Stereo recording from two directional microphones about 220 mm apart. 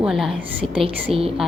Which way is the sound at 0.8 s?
25° right (ahead or behind).